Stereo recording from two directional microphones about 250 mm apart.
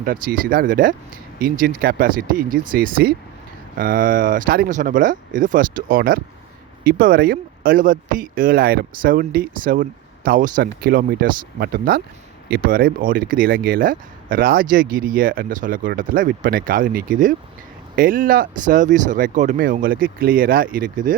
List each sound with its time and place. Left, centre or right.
0.0 s speech: right